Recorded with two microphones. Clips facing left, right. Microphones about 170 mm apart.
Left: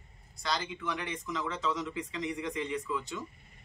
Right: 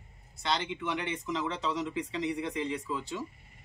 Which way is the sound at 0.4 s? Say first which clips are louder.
Right 3 dB; 25° right (ahead or behind).